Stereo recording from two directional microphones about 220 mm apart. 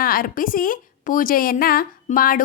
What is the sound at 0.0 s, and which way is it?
A woman's voice, 40° left (ahead or behind).